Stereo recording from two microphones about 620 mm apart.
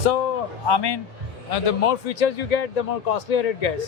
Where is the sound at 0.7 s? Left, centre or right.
Left.